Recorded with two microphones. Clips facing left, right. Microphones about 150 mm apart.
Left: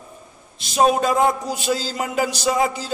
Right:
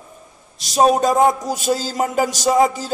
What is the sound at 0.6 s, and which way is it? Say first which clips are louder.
A man's voice: right 2 dB; 40° right (ahead or behind).